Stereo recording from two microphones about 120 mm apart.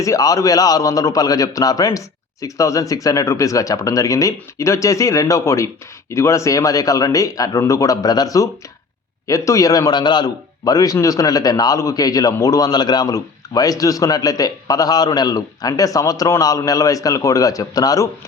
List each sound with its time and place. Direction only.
0.0 s a man's voice: 30° left (ahead or behind)